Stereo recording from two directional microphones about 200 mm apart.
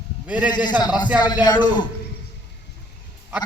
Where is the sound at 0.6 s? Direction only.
20° left (ahead or behind).